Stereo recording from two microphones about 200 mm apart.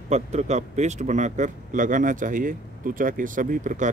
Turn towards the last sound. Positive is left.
turn(degrees=-40)  # may be behind; listen again after turning